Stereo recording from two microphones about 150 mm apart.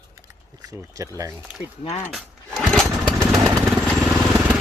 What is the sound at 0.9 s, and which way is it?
Speech, 20° right (ahead or behind).